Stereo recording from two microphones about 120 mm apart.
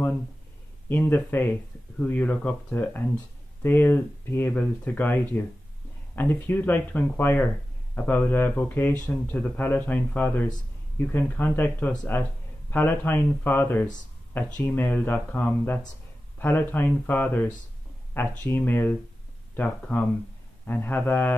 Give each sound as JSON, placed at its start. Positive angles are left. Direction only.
{"t": 0.8, "sound": "speech", "side_deg": 15}